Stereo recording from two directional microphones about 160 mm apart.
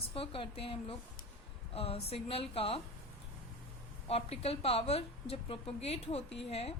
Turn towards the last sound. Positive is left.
turn(degrees=40)  # may be behind; listen again after turning